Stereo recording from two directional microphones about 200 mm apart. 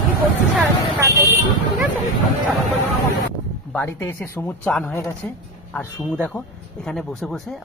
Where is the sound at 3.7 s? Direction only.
10° left (ahead or behind).